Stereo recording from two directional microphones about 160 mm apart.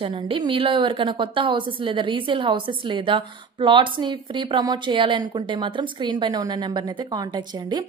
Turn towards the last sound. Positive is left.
turn(degrees=-25)  # may be behind; listen again after turning